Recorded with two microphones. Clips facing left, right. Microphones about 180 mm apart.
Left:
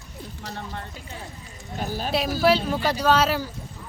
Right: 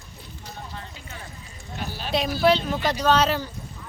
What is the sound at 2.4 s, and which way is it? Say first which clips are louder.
Speech: even; 5° left (ahead or behind).